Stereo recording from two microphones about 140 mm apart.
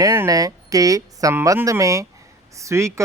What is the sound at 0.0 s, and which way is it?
Speech, 20° right (ahead or behind).